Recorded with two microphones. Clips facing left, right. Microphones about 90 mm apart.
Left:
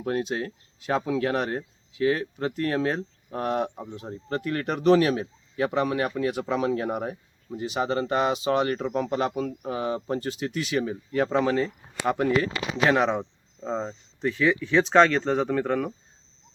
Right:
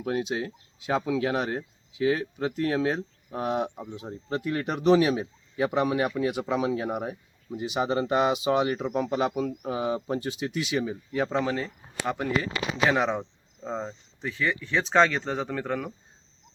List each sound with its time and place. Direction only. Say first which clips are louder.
0.0 s speech: left 1 dB; 5° right (ahead or behind)
12.9 s speech: left 3 dB; 5° right (ahead or behind)